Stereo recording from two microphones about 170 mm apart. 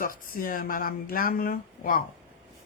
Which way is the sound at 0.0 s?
55° left (ahead or behind).